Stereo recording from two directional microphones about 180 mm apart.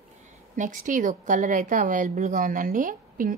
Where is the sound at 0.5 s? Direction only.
45° right (ahead or behind).